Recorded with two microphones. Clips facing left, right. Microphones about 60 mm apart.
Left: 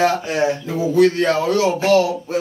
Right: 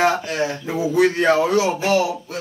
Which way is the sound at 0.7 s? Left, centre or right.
Centre.